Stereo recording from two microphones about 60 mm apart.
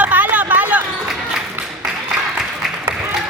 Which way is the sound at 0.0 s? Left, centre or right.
Right.